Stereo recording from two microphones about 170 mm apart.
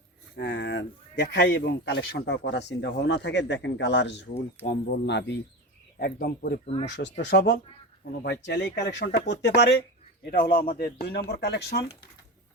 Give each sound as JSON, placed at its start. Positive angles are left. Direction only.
{"t": 0.3, "sound": "speech", "side_deg": 90}
{"t": 6.0, "sound": "speech", "side_deg": 60}
{"t": 6.8, "sound": "speech", "side_deg": 90}
{"t": 10.2, "sound": "speech", "side_deg": 65}